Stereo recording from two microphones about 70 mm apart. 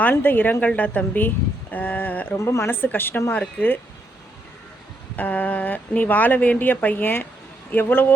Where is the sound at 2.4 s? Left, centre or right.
Left.